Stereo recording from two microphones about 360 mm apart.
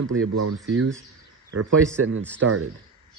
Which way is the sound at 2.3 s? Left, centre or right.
Right.